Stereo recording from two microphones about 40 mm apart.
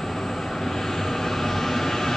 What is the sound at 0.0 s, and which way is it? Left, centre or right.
Vehicle, centre.